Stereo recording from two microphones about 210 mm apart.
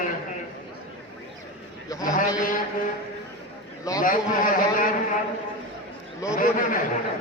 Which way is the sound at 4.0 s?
40° left (ahead or behind).